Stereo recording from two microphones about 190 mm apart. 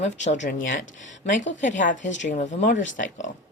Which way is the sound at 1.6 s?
40° left (ahead or behind).